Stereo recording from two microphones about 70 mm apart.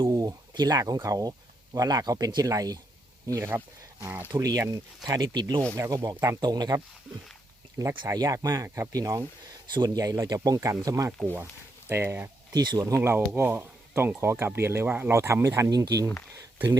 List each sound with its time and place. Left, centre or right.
0.1 s speech: right
5.7 s speech: right
6.4 s speech: right
7.8 s speech: right
8.4 s speech: right
8.9 s speech: right
9.7 s speech: right
11.9 s speech: right
12.5 s speech: right
13.0 s speech: right
15.1 s speech: right
15.7 s speech: right